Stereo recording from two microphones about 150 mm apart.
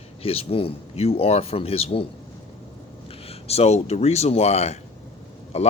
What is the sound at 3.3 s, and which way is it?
Speech, 45° left (ahead or behind).